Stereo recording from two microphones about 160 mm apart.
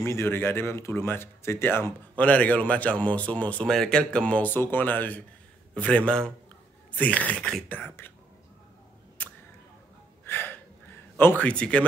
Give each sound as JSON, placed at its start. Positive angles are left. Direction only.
{"t": 0.0, "sound": "a man's voice", "side_deg": 15}
{"t": 9.2, "sound": "a sound", "side_deg": 10}
{"t": 10.2, "sound": "gasp", "side_deg": 15}